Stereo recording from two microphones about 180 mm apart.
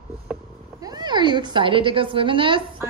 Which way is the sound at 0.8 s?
25° right (ahead or behind).